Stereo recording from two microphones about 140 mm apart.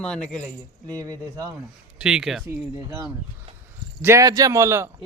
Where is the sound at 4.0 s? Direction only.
20° right (ahead or behind).